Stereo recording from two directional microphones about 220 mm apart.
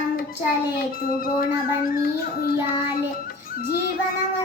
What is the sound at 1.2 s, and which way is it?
Child singing, 40° left (ahead or behind).